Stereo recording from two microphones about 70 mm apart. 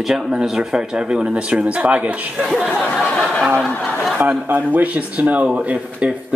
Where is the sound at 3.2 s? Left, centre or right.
Centre.